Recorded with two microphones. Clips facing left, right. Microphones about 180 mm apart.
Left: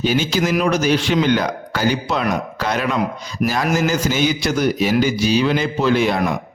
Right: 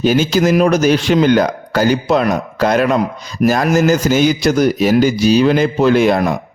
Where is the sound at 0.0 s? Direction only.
45° right (ahead or behind).